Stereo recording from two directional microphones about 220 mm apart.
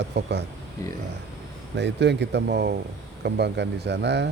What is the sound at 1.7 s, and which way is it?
Speech, 50° right (ahead or behind).